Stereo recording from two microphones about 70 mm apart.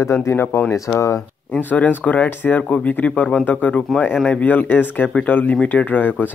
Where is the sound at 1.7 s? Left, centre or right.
Left.